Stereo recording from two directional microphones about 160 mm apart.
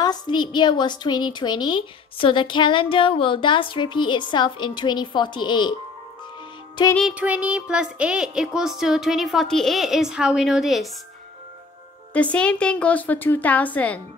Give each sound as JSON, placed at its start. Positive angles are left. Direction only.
{"t": 0.0, "sound": "a woman's voice", "side_deg": 25}
{"t": 7.0, "sound": "child singing", "side_deg": -5}
{"t": 12.1, "sound": "a woman's voice", "side_deg": 10}